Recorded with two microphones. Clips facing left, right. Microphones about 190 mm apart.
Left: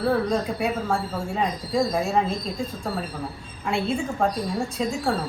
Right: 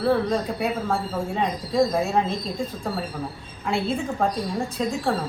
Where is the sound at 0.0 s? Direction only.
Centre (ahead or behind).